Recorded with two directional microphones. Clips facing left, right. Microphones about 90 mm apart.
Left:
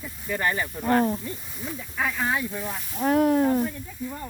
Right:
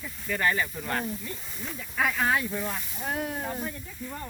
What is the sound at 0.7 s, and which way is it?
Speech, 40° left (ahead or behind).